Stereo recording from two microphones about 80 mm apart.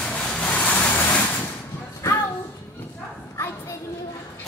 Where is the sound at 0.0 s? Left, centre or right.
Centre.